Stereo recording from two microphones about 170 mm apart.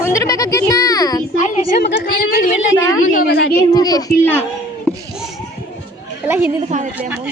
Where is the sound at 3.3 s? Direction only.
75° left (ahead or behind).